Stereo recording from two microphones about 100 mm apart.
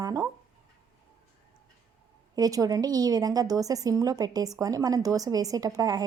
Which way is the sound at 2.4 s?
35° right (ahead or behind).